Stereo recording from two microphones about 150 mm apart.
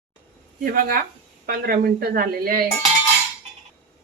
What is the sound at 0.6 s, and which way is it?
Speech, 75° right (ahead or behind).